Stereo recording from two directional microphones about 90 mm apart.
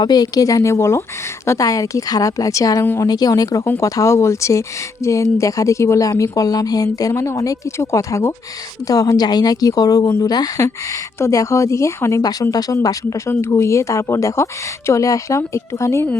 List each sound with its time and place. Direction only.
0.0 s a woman's voice: 50° left (ahead or behind)
8.9 s a woman's voice: 45° left (ahead or behind)
12.2 s speech: 45° left (ahead or behind)